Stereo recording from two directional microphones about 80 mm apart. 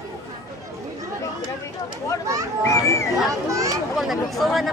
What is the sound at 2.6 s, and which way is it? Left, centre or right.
Children playing, left.